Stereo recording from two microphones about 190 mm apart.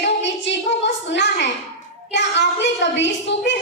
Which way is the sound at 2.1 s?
70° left (ahead or behind).